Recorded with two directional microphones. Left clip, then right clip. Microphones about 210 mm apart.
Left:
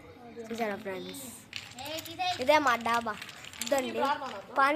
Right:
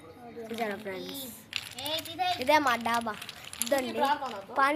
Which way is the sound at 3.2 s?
20° right (ahead or behind).